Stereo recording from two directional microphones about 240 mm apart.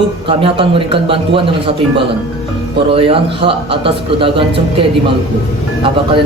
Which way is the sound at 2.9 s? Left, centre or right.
Right.